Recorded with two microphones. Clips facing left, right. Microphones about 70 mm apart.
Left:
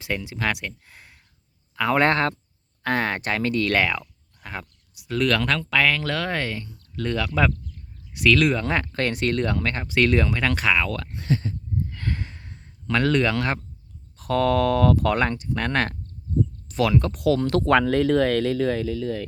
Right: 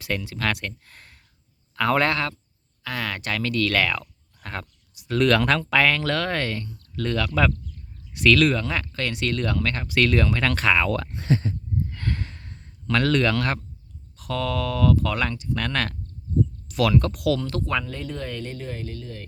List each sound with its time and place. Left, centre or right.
0.0 s speech: centre
2.0 s speech: left
4.4 s a sound: centre
4.9 s speech: centre
8.6 s speech: left; by 10.8 s centre
10.8 s speech: centre
11.1 s speech: right
11.9 s a sound: centre
14.2 s speech: left
15.2 s speech: left
16.6 s a sound: left
16.9 s speech: centre
17.2 s speech: left
17.4 s speech: left